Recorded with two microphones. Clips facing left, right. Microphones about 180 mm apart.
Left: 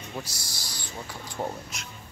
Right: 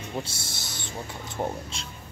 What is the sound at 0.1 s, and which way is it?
Speech, 25° right (ahead or behind).